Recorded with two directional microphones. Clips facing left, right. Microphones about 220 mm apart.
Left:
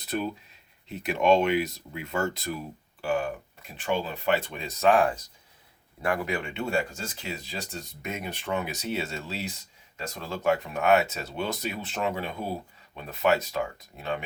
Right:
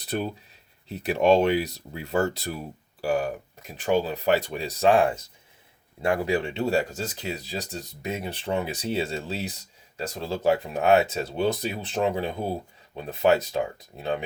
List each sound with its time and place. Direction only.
0.0 s speech: 35° right (ahead or behind)